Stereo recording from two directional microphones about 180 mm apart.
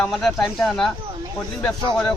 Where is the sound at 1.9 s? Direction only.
5° left (ahead or behind).